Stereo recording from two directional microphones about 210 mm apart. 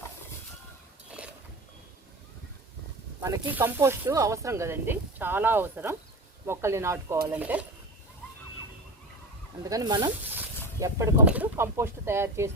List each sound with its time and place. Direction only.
3.2 s speech: 10° right (ahead or behind)
9.6 s speech: 20° right (ahead or behind)
10.3 s snake: 15° right (ahead or behind)
11.3 s speech: 10° right (ahead or behind)